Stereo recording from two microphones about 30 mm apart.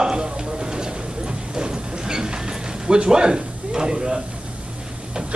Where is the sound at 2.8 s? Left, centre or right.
Right.